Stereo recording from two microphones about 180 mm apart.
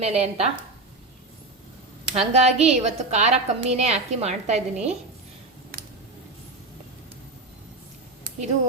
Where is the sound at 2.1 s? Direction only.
35° right (ahead or behind).